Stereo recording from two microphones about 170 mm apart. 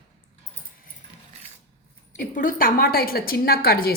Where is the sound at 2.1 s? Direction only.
50° left (ahead or behind).